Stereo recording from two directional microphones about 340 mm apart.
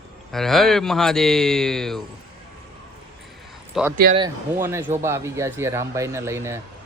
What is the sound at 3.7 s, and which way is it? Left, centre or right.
Speech, centre.